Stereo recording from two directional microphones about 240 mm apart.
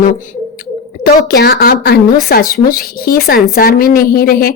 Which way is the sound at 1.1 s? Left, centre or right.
Left.